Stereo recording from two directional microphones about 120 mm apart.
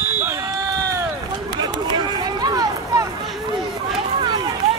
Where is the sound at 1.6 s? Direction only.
35° right (ahead or behind).